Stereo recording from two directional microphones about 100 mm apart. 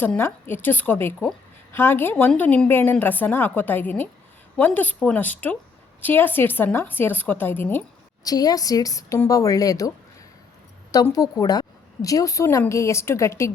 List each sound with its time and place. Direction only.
0.2 s a woman's voice: 25° left (ahead or behind)
8.2 s speech: 40° left (ahead or behind)
11.1 s a woman's voice: 35° left (ahead or behind)